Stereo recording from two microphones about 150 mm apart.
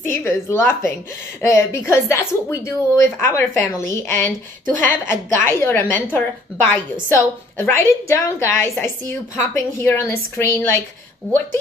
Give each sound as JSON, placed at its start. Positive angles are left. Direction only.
{"t": 0.1, "sound": "a woman's voice", "side_deg": 15}